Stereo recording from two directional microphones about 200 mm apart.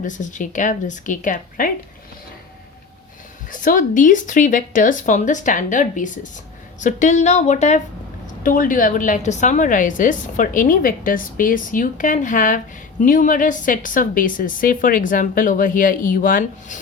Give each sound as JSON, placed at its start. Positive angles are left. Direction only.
{"t": 0.0, "sound": "a woman's voice", "side_deg": 40}
{"t": 3.5, "sound": "a woman's voice", "side_deg": 40}